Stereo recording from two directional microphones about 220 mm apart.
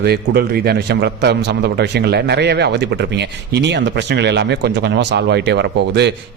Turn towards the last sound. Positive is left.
turn(degrees=-50)  # may be behind; listen again after turning